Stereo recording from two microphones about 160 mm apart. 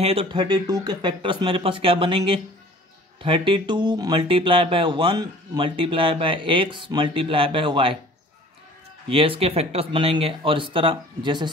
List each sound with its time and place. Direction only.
0.0 s speech: 35° right (ahead or behind)
9.1 s speech: 35° right (ahead or behind)